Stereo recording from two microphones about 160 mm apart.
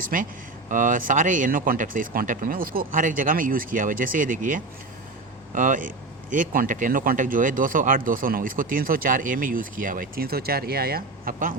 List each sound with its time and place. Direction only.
0.0 s speech: 60° right (ahead or behind)